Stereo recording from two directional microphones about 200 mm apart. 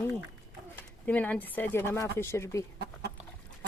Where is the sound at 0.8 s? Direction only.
10° left (ahead or behind).